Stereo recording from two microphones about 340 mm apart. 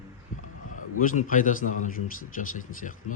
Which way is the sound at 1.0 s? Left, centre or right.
Left.